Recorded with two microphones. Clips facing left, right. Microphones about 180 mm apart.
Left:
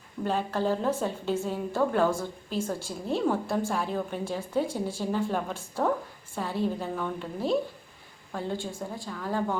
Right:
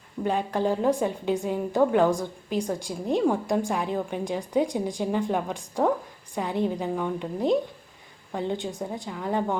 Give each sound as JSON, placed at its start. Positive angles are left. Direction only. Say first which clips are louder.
{"t": 0.3, "sound": "a woman's voice", "louder": "right 2 dB", "side_deg": -15}